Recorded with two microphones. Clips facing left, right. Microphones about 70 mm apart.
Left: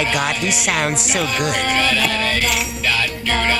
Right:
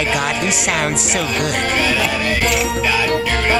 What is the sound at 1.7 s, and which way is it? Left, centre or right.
Music, centre.